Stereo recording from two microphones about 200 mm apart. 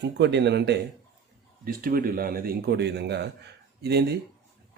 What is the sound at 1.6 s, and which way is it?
A man's voice, 45° right (ahead or behind).